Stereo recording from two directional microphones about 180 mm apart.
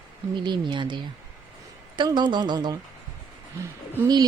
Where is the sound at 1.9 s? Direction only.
25° right (ahead or behind).